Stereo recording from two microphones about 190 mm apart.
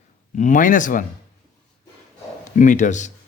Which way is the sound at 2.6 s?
40° left (ahead or behind).